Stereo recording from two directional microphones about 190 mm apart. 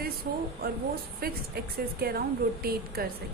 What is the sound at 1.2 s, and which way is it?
Speech, 55° right (ahead or behind).